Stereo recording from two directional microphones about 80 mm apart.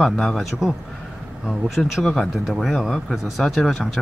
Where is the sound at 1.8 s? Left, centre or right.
Centre.